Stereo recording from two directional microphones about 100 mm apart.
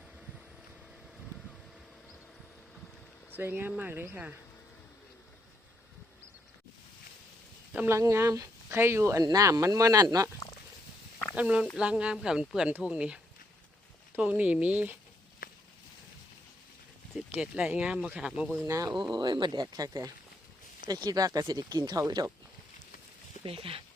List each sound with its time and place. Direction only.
3.3 s speech: 20° right (ahead or behind)
7.9 s speech: 30° right (ahead or behind)
11.3 s speech: 10° right (ahead or behind)
14.2 s speech: 15° right (ahead or behind)
17.4 s speech: 5° right (ahead or behind)
18.6 s speech: 35° right (ahead or behind)
19.1 s speech: 45° right (ahead or behind)
23.4 s speech: 65° right (ahead or behind)